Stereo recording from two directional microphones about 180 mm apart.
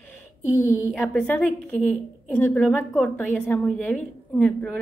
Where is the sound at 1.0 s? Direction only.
10° left (ahead or behind).